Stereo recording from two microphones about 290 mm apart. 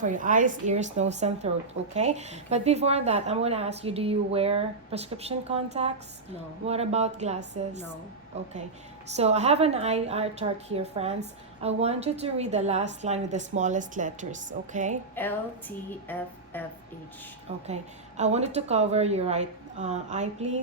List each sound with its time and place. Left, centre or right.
0.0 s speech: right
9.1 s speech: right
15.1 s speech: centre
17.5 s speech: right